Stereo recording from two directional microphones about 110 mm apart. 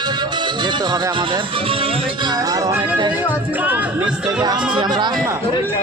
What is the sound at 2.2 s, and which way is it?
Music, 35° right (ahead or behind).